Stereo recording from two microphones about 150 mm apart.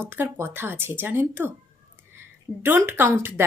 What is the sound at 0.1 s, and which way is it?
A woman's voice, 15° right (ahead or behind).